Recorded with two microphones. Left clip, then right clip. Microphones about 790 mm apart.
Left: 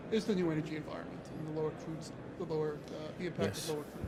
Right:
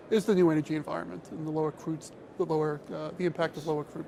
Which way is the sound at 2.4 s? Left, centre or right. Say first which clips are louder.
Right 8 dB; right.